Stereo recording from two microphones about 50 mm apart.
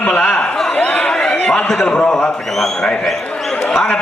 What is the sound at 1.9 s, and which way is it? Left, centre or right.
Speech, centre.